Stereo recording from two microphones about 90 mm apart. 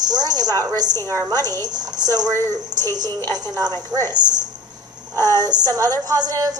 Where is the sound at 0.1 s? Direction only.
45° right (ahead or behind).